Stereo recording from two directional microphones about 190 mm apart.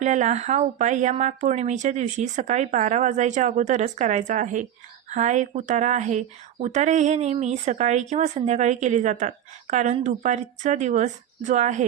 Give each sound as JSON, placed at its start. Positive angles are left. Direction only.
{"t": 0.0, "sound": "speech", "side_deg": -40}